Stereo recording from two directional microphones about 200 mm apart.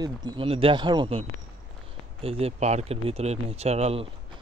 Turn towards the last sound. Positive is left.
turn(degrees=-30)  # may be behind; listen again after turning